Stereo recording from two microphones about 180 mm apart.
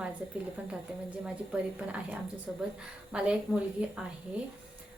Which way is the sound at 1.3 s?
5° right (ahead or behind).